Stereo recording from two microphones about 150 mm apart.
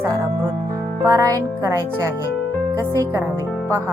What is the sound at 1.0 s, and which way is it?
Speech, 20° right (ahead or behind).